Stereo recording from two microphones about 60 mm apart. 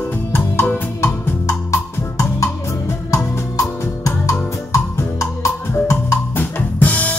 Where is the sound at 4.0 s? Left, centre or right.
Left.